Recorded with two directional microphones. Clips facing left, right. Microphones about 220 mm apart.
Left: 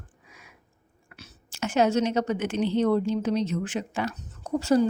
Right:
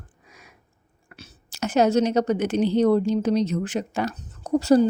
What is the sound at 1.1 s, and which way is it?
A woman's voice, 35° right (ahead or behind).